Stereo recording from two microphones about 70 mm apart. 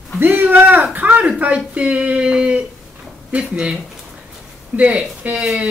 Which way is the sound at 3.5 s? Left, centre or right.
Centre.